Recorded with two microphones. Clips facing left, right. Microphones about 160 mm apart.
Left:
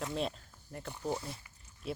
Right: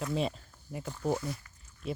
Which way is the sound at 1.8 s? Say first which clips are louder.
Right 3 dB; centre (ahead or behind).